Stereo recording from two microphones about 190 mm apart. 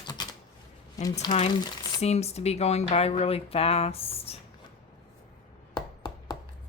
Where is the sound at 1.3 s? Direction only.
30° left (ahead or behind).